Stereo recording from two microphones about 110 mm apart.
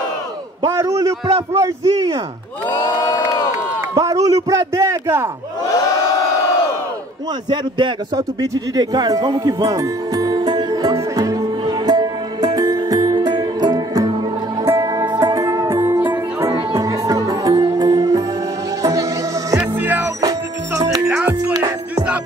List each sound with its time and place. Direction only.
0.7 s speech: 30° right (ahead or behind)
2.7 s crowd: 40° left (ahead or behind)
3.9 s a sound: 35° right (ahead or behind)
7.4 s a sound: 45° right (ahead or behind)
14.6 s music: 25° right (ahead or behind)
19.8 s music: 15° right (ahead or behind)
20.8 s music: 30° right (ahead or behind)
21.3 s music: 15° right (ahead or behind)
21.5 s music: 35° right (ahead or behind)